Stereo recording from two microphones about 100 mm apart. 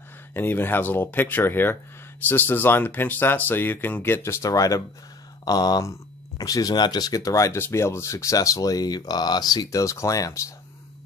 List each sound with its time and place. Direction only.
0.3 s speech: 20° left (ahead or behind)